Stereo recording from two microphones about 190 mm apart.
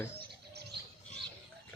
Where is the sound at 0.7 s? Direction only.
60° right (ahead or behind).